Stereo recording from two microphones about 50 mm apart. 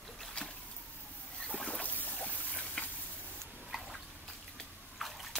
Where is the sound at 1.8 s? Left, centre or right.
Left.